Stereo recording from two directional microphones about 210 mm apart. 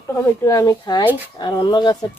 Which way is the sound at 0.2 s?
15° left (ahead or behind).